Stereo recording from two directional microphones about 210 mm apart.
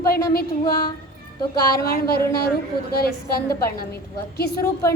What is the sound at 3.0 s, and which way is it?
A woman's voice, 45° left (ahead or behind).